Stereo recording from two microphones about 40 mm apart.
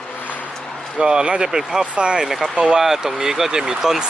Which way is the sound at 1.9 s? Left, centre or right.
Right.